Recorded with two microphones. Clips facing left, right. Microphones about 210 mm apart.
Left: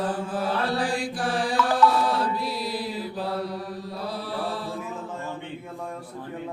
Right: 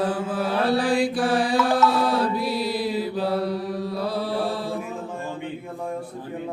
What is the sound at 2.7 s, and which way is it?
Mantra, 70° right (ahead or behind).